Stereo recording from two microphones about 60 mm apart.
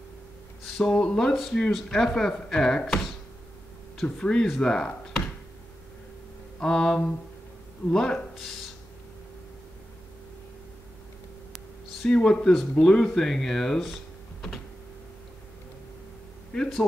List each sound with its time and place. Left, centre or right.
0.7 s speech: centre
1.3 s speech: centre
2.9 s speech: centre
4.0 s speech: centre
6.6 s speech: centre
12.1 s speech: centre
16.5 s speech: centre